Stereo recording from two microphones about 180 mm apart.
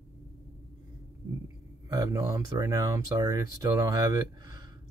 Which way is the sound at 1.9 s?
20° right (ahead or behind).